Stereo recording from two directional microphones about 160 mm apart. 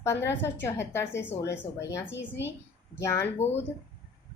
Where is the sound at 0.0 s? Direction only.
15° left (ahead or behind).